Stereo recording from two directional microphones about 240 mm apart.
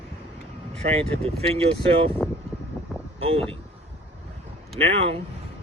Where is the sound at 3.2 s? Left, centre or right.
Right.